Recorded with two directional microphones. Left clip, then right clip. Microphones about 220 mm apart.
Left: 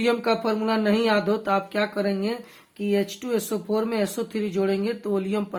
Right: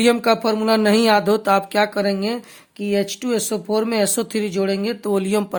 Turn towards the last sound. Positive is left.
turn(degrees=-55)  # may be behind; listen again after turning